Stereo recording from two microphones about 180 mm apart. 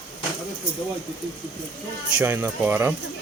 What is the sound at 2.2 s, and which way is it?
Speech, 10° right (ahead or behind).